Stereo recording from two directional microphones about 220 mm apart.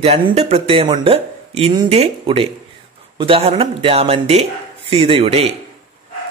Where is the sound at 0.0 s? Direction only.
30° right (ahead or behind).